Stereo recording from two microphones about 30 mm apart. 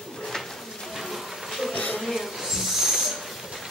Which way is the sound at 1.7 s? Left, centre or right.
Left.